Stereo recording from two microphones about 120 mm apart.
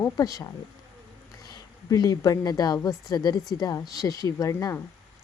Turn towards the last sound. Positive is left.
turn(degrees=25)  # may be behind; listen again after turning